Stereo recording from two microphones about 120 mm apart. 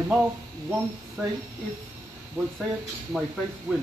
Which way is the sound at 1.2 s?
20° right (ahead or behind).